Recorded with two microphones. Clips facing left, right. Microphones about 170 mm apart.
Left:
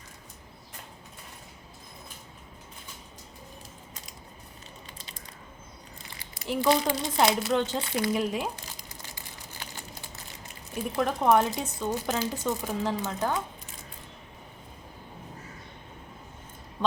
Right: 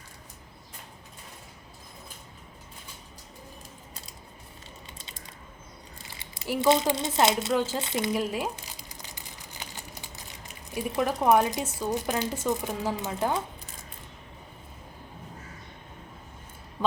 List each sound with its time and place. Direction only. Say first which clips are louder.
6.6 s speech: right 2 dB; 25° right (ahead or behind)
7.5 s speech: even; 5° right (ahead or behind)
7.8 s speech: left 1 dB; 20° right (ahead or behind)
8.1 s speech: even; centre (ahead or behind)
10.8 s speech: right 1 dB; 5° right (ahead or behind)